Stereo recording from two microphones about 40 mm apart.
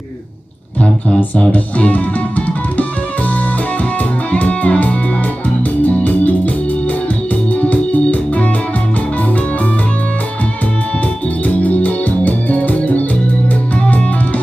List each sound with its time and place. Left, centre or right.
1.5 s music: left
4.3 s music: left
7.5 s music: left
11.4 s organ: left